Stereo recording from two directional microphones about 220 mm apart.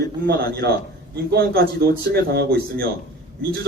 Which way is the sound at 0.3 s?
45° right (ahead or behind).